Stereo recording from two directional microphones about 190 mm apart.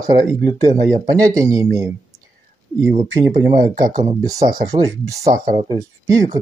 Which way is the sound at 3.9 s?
20° right (ahead or behind).